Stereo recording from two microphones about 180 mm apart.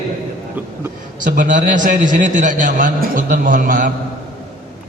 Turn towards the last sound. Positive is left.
turn(degrees=-50)  # may be behind; listen again after turning